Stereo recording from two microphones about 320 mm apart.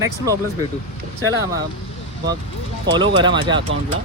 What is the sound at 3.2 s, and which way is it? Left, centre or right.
Speech, centre.